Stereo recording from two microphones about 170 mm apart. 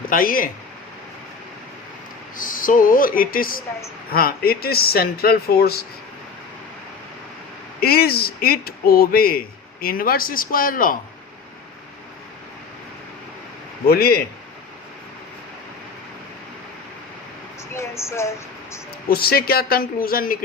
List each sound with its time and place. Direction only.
0.1 s speech: 55° left (ahead or behind)
2.3 s speech: 50° left (ahead or behind)
7.8 s speech: 65° left (ahead or behind)
13.8 s speech: 65° left (ahead or behind)
17.7 s speech: 15° left (ahead or behind)
19.0 s speech: 65° left (ahead or behind)